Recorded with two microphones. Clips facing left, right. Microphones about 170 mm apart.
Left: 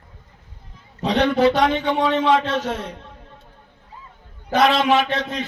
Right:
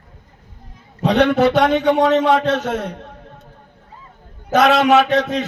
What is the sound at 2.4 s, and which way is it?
Speech, 50° right (ahead or behind).